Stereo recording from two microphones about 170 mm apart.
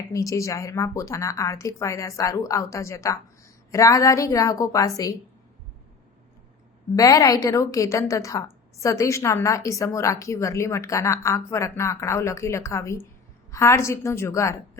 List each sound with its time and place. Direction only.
0.1 s a woman's voice: 20° left (ahead or behind)
6.9 s a woman's voice: 20° left (ahead or behind)